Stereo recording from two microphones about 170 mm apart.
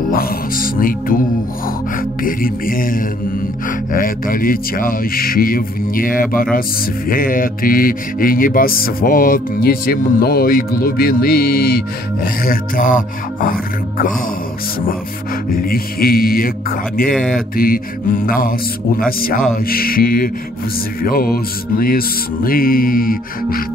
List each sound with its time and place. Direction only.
0.1 s music: 55° left (ahead or behind)
15.5 s music: 60° left (ahead or behind)